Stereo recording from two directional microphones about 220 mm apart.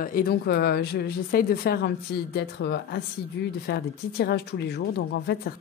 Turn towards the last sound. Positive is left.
turn(degrees=45)  # may be behind; listen again after turning